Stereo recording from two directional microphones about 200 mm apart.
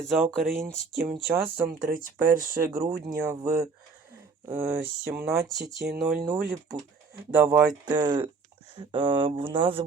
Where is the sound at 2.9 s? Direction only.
15° right (ahead or behind).